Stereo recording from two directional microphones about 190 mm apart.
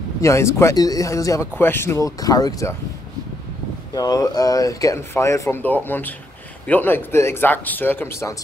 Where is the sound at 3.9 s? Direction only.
20° left (ahead or behind).